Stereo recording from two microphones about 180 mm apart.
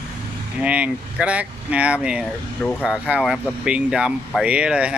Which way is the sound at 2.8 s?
5° right (ahead or behind).